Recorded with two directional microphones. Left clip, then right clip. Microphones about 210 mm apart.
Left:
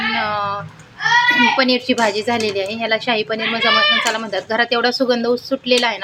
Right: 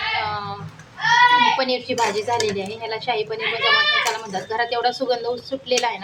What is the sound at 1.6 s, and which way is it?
Speech, 30° left (ahead or behind).